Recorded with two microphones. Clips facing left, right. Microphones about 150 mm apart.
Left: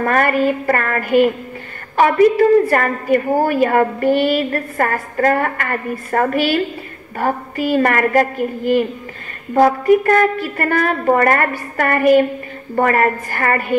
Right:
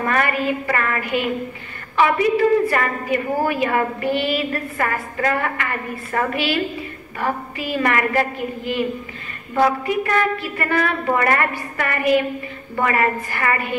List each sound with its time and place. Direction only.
0.0 s a woman's voice: 45° left (ahead or behind)